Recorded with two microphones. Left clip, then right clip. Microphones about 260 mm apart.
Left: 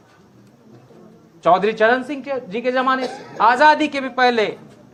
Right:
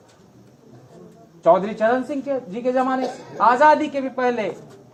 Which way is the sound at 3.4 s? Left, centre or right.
Left.